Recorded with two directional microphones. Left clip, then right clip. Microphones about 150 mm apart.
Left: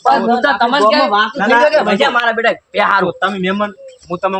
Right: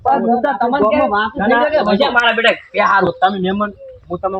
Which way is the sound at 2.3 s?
20° left (ahead or behind).